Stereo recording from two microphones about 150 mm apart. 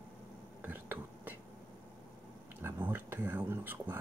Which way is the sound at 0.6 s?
15° right (ahead or behind).